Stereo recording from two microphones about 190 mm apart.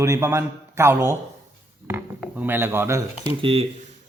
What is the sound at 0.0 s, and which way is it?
A man's voice, 15° right (ahead or behind).